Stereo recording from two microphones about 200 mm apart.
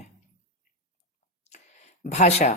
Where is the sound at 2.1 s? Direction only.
35° left (ahead or behind).